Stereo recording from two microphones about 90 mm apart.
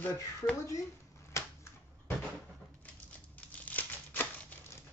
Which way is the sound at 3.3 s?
15° left (ahead or behind).